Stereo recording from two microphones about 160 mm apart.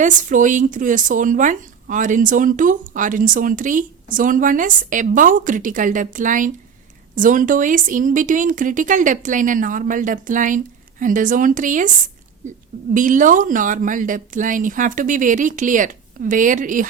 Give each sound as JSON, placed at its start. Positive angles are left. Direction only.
{"t": 0.0, "sound": "speech", "side_deg": -50}